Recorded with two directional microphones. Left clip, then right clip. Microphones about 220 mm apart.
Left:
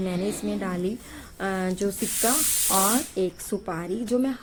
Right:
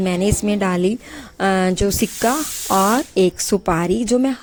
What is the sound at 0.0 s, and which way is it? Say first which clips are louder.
Speech: right 9 dB; 40° right (ahead or behind).